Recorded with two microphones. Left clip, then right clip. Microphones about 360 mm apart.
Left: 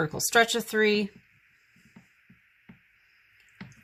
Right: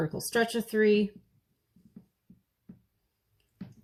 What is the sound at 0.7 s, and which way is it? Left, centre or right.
Speech, left.